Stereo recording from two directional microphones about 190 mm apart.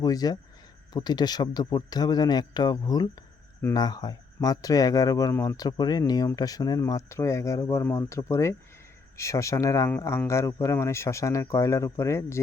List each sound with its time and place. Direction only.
0.0 s speech: 20° left (ahead or behind)